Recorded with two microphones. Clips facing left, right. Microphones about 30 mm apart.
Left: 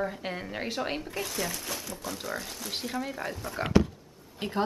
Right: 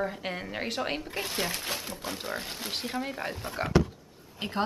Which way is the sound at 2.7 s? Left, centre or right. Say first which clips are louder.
Even; right.